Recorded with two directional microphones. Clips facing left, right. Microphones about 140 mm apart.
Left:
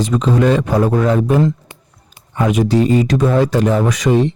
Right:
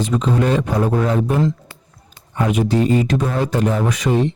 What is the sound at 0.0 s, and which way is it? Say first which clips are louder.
Speech: left 4 dB; 90° left.